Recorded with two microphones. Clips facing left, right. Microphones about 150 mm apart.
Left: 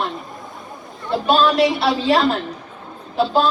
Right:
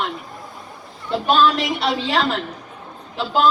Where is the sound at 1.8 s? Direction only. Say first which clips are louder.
Left 4 dB; 35° left (ahead or behind).